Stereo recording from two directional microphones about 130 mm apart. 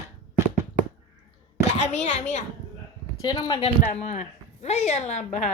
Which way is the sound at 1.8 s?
60° left (ahead or behind).